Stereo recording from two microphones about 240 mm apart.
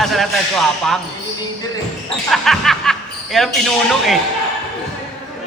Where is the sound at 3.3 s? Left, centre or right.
Centre.